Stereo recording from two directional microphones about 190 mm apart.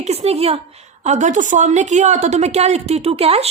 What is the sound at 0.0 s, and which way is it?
A woman's voice, 35° right (ahead or behind).